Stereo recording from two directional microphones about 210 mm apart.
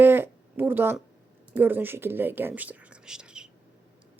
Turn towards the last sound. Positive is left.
turn(degrees=-5)  # may be behind; listen again after turning